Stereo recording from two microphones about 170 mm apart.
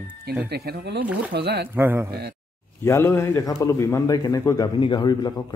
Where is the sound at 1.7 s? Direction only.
15° right (ahead or behind).